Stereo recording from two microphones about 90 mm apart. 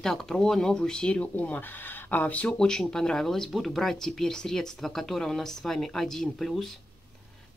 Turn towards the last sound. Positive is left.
turn(degrees=0)  # may be behind; listen again after turning